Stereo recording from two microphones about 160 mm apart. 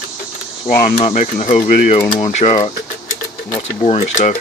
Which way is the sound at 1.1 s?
50° left (ahead or behind).